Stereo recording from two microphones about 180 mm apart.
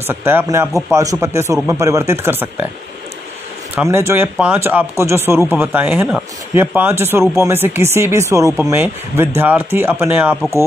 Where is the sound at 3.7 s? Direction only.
10° right (ahead or behind).